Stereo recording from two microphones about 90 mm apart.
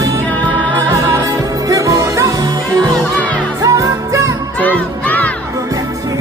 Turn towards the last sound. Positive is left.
turn(degrees=15)  # may be behind; listen again after turning